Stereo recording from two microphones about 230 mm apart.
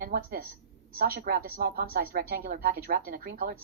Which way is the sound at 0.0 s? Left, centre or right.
Right.